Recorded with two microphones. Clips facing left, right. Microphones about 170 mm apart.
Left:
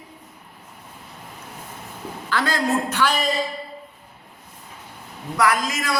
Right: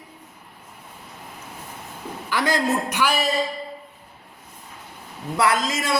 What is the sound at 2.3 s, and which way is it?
Speech, 15° right (ahead or behind).